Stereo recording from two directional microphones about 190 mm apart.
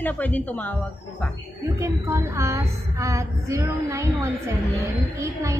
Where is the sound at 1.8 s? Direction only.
15° right (ahead or behind).